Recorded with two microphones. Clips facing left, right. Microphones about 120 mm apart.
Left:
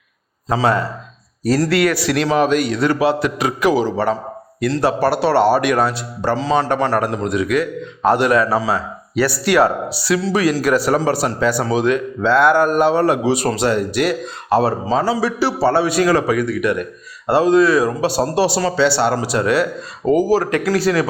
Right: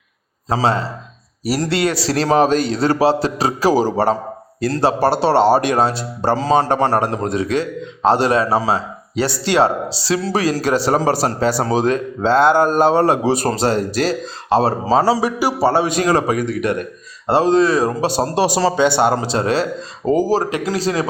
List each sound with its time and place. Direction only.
0.4 s speech: 30° right (ahead or behind)
15.2 s a man's voice: 15° right (ahead or behind)
16.0 s speech: 30° right (ahead or behind)